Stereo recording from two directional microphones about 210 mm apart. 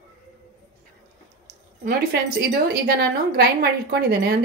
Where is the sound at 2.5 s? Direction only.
45° right (ahead or behind).